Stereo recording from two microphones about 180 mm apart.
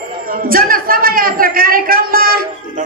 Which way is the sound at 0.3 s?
55° right (ahead or behind).